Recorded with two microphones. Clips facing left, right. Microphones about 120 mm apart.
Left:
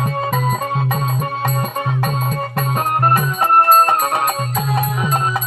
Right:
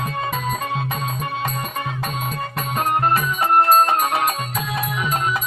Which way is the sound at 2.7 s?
40° left (ahead or behind).